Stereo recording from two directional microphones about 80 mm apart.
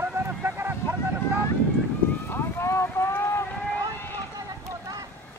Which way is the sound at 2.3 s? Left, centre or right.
Left.